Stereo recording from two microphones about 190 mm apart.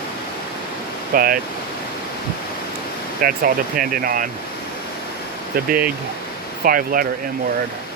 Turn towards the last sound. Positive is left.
turn(degrees=-50)  # may be behind; listen again after turning